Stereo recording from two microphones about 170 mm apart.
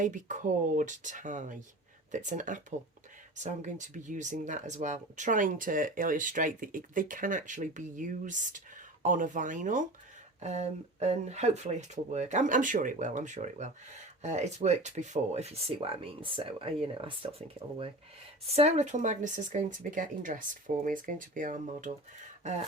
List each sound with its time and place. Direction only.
0.0 s speech: 50° right (ahead or behind)